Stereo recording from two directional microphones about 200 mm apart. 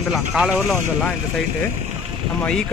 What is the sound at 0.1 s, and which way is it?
Speech, 5° right (ahead or behind).